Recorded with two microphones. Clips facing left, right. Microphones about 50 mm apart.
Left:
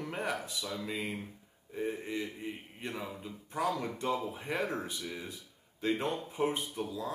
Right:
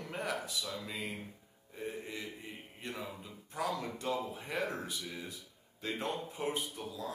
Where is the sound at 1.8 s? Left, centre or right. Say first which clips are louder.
Left 6 dB; centre.